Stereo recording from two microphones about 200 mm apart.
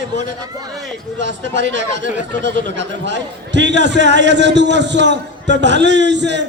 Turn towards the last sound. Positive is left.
turn(degrees=-60)  # may be behind; listen again after turning